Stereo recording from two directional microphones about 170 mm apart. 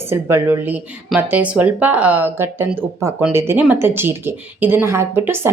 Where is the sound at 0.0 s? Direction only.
15° right (ahead or behind).